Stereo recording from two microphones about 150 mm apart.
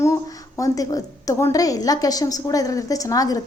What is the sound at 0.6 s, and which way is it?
A woman's voice, 25° left (ahead or behind).